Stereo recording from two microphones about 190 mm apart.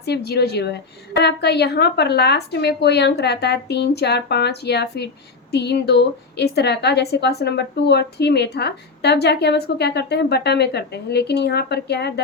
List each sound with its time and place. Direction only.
0.0 s a woman's voice: 60° left (ahead or behind)